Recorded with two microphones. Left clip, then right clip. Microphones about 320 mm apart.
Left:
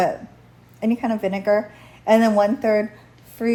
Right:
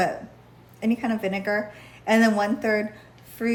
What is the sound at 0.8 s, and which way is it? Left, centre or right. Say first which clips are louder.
A woman's voice: left 4 dB; centre.